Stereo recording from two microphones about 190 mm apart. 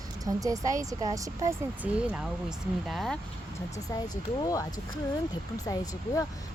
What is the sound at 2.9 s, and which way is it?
Speech, centre (ahead or behind).